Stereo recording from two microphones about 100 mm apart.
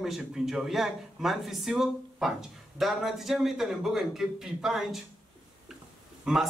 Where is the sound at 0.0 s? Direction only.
5° right (ahead or behind).